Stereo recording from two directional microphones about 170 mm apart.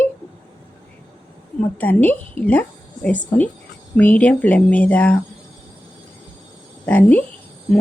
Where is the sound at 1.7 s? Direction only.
10° left (ahead or behind).